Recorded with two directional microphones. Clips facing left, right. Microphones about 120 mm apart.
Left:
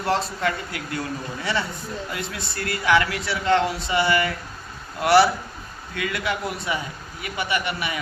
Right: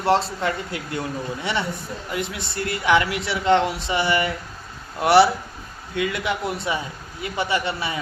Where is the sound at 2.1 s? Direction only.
20° right (ahead or behind).